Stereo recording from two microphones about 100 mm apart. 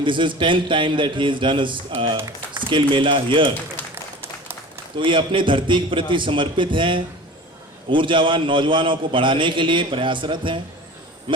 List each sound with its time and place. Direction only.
0.0 s a man's voice: 55° right (ahead or behind)
4.9 s a man's voice: 55° right (ahead or behind)